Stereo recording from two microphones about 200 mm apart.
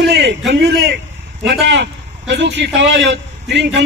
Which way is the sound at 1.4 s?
55° right (ahead or behind).